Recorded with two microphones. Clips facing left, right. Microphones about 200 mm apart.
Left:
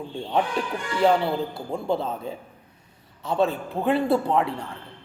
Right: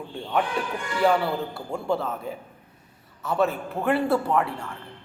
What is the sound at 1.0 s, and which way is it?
Speech, 20° left (ahead or behind).